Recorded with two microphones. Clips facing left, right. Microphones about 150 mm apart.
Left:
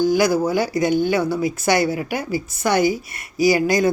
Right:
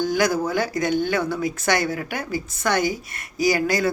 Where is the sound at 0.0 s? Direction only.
5° left (ahead or behind).